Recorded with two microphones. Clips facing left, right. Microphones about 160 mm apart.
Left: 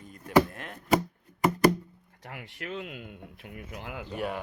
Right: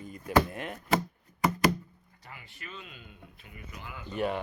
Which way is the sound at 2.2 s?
75° left (ahead or behind).